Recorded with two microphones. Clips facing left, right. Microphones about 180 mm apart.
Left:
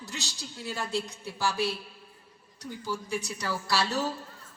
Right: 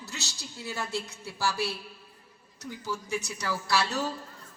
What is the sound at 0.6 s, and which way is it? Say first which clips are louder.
Speech: left 1 dB; 15° left (ahead or behind).